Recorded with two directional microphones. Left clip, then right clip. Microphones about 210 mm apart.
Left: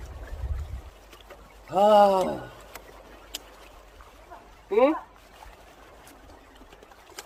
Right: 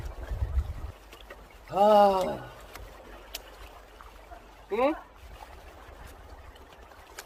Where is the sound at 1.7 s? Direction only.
40° left (ahead or behind).